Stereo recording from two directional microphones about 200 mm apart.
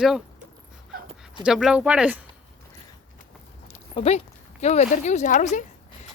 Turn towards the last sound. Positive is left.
turn(degrees=40)  # may be behind; listen again after turning